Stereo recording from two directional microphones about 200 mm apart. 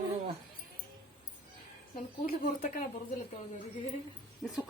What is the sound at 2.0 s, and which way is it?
Speech, 40° left (ahead or behind).